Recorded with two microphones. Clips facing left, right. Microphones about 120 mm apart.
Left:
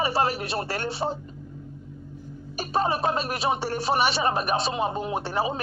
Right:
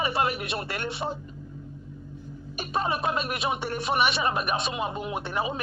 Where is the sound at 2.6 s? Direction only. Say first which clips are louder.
Left 3 dB; 35° left (ahead or behind).